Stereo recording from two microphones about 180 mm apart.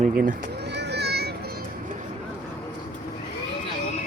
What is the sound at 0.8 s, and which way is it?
Children playing, 65° right (ahead or behind).